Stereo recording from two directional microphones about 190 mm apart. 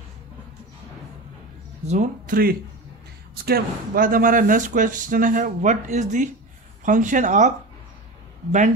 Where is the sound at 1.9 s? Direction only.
45° right (ahead or behind).